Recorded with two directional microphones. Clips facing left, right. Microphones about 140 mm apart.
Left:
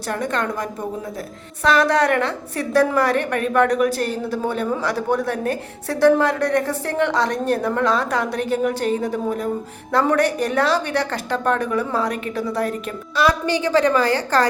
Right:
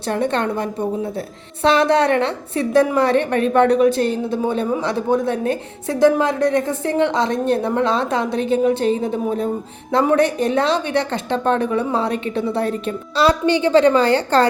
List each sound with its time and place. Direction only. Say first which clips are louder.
0.1 s a woman's voice: right 4 dB; 30° right (ahead or behind)